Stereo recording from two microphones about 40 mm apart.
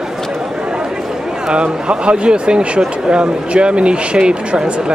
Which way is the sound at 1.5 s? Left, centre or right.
Right.